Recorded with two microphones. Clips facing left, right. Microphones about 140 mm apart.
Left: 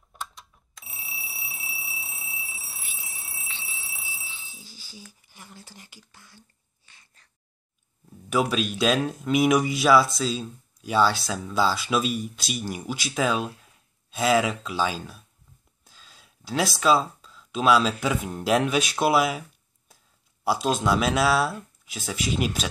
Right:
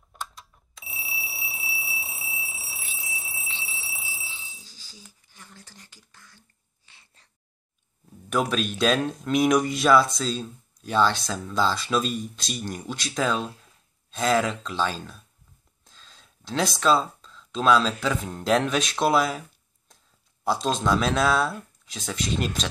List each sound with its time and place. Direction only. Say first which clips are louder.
0.1 s alarm clock: even; centre (ahead or behind)
3.6 s alarm: right 2 dB; centre (ahead or behind)
5.3 s speech: left 1 dB; 15° left (ahead or behind)
6.9 s cat: even; 25° right (ahead or behind)
8.3 s speech: left 1 dB; 5° left (ahead or behind)
20.4 s speech: left 1 dB; 10° left (ahead or behind)